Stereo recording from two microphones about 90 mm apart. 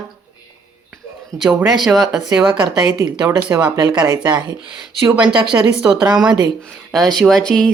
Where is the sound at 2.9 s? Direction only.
45° right (ahead or behind).